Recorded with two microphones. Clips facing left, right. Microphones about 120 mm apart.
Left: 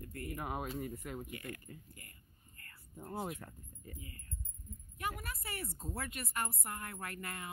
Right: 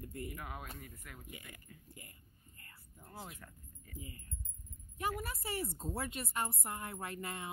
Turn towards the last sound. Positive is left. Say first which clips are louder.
# right 2 dB
turn(degrees=-20)  # may be behind; listen again after turning